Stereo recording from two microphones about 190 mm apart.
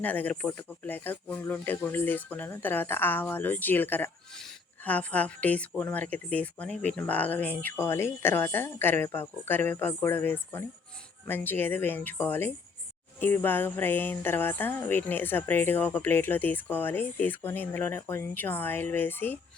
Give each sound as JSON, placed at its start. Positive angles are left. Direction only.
{"t": 0.0, "sound": "a woman's voice", "side_deg": 10}